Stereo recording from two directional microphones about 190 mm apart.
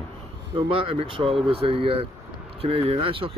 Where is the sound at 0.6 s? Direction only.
30° right (ahead or behind).